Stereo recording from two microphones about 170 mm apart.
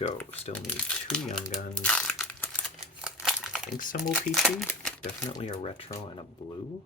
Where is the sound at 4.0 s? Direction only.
Centre (ahead or behind).